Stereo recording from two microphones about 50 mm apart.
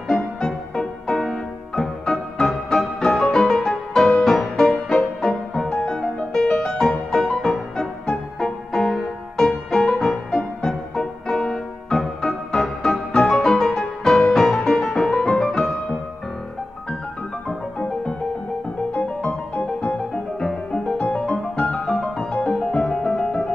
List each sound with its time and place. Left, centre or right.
0.4 s music: centre
18.9 s music: left
20.3 s music: centre
22.5 s music: centre